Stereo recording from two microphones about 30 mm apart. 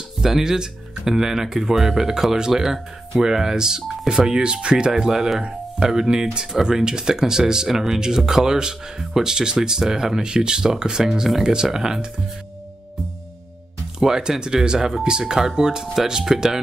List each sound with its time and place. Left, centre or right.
0.2 s speech: centre
3.8 s telephone dialing: centre
4.4 s speech: right
4.9 s speech: centre
10.2 s speech: right
13.9 s speech: centre